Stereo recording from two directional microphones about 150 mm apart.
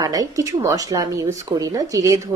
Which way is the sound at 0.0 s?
25° right (ahead or behind).